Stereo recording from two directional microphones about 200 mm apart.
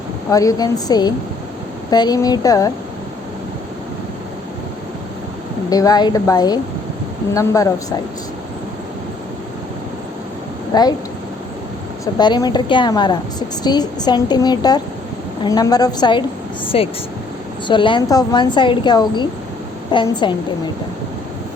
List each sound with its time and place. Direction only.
0.3 s a woman's voice: 15° left (ahead or behind)
5.7 s a woman's voice: 20° left (ahead or behind)
10.7 s speech: 20° left (ahead or behind)
12.1 s speech: 20° left (ahead or behind)